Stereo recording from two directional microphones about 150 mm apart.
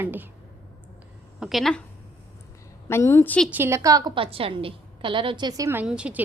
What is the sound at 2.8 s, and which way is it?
Speech, 15° left (ahead or behind).